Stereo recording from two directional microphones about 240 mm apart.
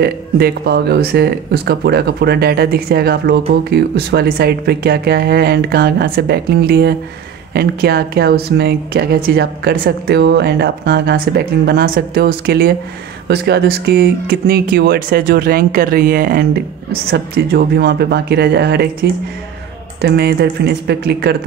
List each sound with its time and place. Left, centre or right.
0.0 s speech: right
20.0 s speech: right